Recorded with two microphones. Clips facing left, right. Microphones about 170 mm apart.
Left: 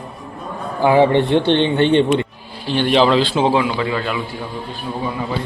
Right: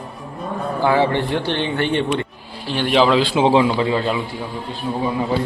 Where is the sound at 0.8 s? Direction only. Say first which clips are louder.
Left 5 dB; 15° left (ahead or behind).